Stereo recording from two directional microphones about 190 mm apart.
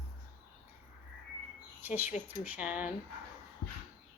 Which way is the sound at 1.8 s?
10° right (ahead or behind).